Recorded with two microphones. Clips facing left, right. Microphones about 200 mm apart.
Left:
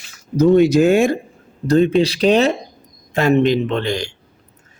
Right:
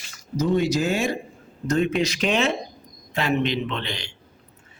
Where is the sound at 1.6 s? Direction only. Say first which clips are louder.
Left 8 dB; 35° left (ahead or behind).